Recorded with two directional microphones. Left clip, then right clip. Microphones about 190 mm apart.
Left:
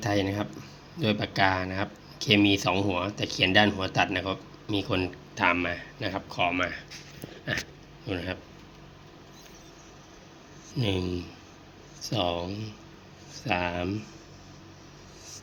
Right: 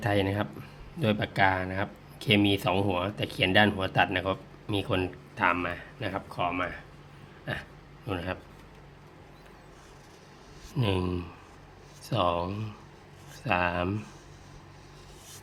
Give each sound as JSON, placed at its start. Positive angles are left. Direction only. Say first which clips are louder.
{"t": 0.0, "sound": "speech", "louder": "even", "side_deg": -20}
{"t": 5.3, "sound": "speech", "louder": "left 2 dB", "side_deg": -5}
{"t": 8.0, "sound": "speech", "louder": "left 1 dB", "side_deg": -15}
{"t": 10.8, "sound": "speech", "louder": "even", "side_deg": -25}